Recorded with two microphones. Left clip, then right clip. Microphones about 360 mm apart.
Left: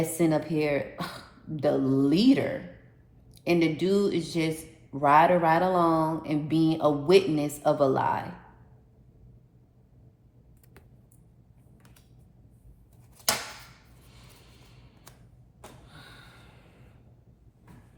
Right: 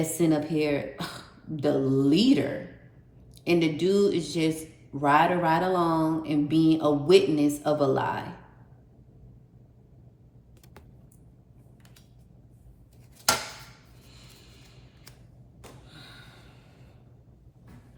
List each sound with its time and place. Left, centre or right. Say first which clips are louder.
0.0 s speech: even; centre